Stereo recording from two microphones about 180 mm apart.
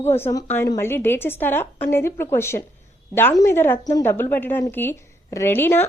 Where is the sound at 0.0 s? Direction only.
15° left (ahead or behind).